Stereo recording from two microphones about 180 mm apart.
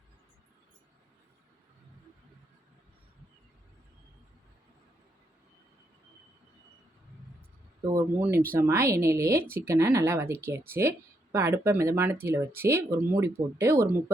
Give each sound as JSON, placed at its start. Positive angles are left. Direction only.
{"t": 7.9, "sound": "speech", "side_deg": -15}